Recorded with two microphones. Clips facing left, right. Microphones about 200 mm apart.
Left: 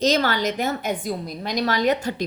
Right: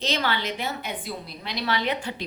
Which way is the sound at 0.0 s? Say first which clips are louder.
Left 7 dB; 40° left (ahead or behind).